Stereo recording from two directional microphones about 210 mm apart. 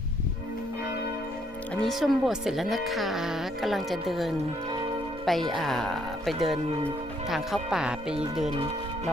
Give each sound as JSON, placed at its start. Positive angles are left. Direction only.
{"t": 1.7, "sound": "speech", "side_deg": 0}